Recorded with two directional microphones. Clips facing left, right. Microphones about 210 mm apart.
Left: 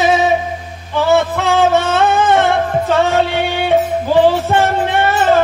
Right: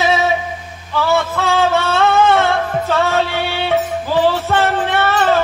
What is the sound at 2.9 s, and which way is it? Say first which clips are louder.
Music: left 3 dB; 15° left (ahead or behind).